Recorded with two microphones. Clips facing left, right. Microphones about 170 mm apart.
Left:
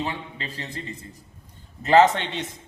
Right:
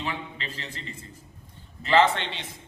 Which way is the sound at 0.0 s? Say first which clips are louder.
Left 3 dB; 35° left (ahead or behind).